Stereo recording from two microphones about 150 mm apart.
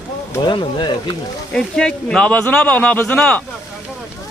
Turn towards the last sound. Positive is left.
turn(degrees=5)  # may be behind; listen again after turning